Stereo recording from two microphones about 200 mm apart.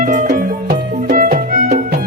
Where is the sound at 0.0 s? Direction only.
40° right (ahead or behind).